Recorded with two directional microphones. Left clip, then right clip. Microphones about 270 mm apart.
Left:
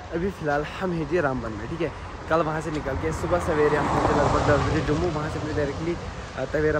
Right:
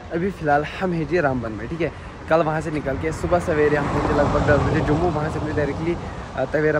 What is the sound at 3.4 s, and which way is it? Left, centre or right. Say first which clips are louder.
Speech: right 1 dB; left.